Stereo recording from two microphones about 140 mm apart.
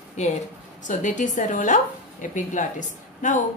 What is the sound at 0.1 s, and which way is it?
A woman's voice, 55° left (ahead or behind).